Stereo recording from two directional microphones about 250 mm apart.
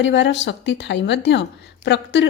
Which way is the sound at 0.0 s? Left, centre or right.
Left.